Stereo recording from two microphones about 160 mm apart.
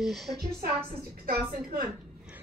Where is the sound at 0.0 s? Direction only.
Centre (ahead or behind).